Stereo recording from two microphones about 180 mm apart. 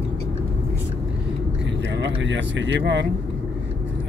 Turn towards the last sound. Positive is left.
turn(degrees=-80)